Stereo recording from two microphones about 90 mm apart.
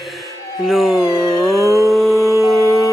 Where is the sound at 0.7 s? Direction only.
Centre (ahead or behind).